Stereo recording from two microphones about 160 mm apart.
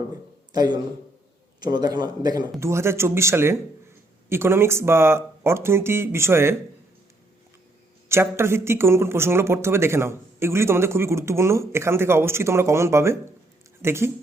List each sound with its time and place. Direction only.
0.5 s a man's voice: 25° right (ahead or behind)
8.1 s speech: 15° right (ahead or behind)